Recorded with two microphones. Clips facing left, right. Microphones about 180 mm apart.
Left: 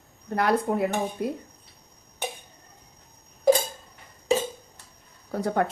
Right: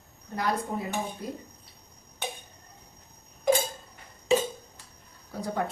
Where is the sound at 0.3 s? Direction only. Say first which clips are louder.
Left 6 dB; 65° left (ahead or behind).